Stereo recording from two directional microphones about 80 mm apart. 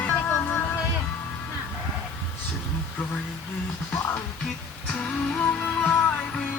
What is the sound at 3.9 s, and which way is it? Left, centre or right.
Music, left.